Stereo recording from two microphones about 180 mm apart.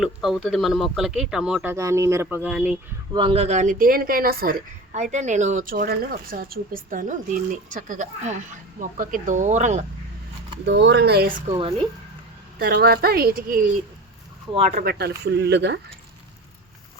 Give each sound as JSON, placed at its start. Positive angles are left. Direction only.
{"t": 0.0, "sound": "speech", "side_deg": 0}
{"t": 3.1, "sound": "speech", "side_deg": -30}
{"t": 5.1, "sound": "speech", "side_deg": -40}
{"t": 10.7, "sound": "speech", "side_deg": -75}
{"t": 11.4, "sound": "speech", "side_deg": -30}
{"t": 12.5, "sound": "a woman's voice", "side_deg": -55}
{"t": 14.8, "sound": "a woman's voice", "side_deg": -60}
{"t": 15.2, "sound": "speech", "side_deg": -70}